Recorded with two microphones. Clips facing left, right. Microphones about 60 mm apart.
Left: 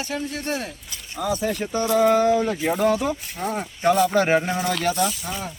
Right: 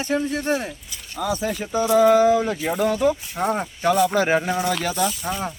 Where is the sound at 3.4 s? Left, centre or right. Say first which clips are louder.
Right 5 dB; right.